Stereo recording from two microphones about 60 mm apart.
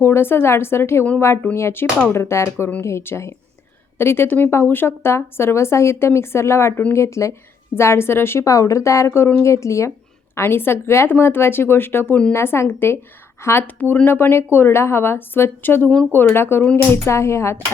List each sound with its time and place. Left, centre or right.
0.0 s speech: left
8.4 s speech: left
10.3 s speech: left